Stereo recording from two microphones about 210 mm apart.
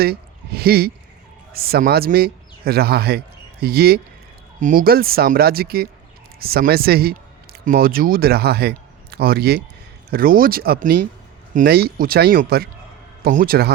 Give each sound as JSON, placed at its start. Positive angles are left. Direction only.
{"t": 0.0, "sound": "speech", "side_deg": -50}